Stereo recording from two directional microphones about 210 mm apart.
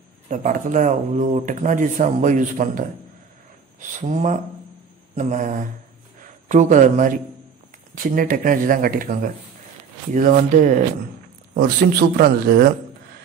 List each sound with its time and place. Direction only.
0.3 s speech: 35° right (ahead or behind)
4.0 s speech: 35° right (ahead or behind)